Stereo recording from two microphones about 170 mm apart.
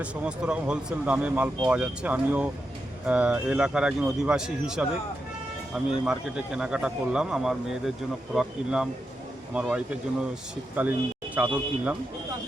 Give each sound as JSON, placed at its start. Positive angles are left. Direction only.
{"t": 0.0, "sound": "speech", "side_deg": -5}